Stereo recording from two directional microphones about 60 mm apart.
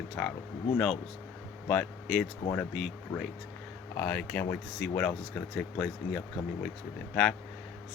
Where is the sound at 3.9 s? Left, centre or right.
Left.